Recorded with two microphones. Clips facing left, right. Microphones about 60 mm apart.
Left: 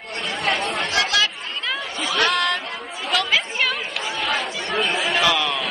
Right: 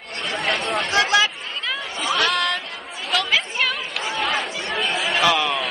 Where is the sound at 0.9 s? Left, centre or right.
Right.